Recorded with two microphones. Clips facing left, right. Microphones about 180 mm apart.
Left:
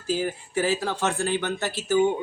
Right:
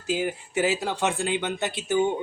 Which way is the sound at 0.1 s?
20° right (ahead or behind).